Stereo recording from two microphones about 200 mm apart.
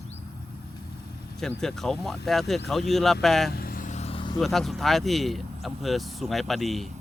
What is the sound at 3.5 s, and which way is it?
Vehicle, 50° left (ahead or behind).